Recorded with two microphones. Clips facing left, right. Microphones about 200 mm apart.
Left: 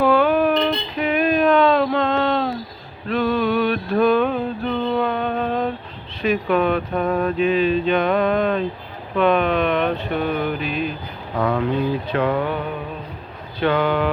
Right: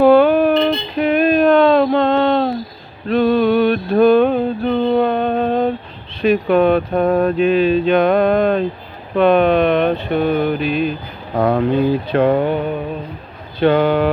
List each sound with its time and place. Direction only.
0.0 s a sound: 30° right (ahead or behind)
3.1 s music: 30° right (ahead or behind)
6.2 s speech: 35° right (ahead or behind)
10.6 s a sound: centre (ahead or behind)
11.3 s speech: 35° right (ahead or behind)
13.6 s speech: 35° right (ahead or behind)